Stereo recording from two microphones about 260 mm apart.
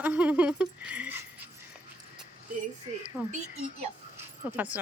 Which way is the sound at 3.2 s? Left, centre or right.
Centre.